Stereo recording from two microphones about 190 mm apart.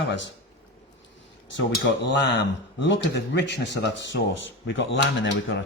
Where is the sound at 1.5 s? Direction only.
70° left (ahead or behind).